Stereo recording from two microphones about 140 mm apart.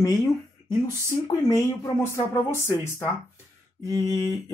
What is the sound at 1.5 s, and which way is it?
Speech, 20° left (ahead or behind).